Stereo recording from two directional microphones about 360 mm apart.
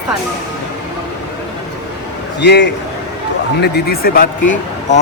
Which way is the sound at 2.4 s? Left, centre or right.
Left.